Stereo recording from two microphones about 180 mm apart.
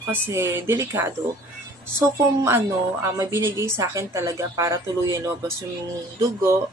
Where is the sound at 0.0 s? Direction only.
15° right (ahead or behind).